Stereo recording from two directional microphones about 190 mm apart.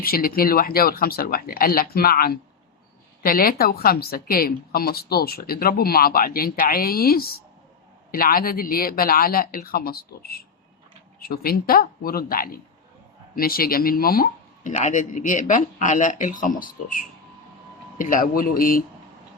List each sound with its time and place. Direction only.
0.0 s a woman's voice: 50° left (ahead or behind)
17.9 s a woman's voice: 45° left (ahead or behind)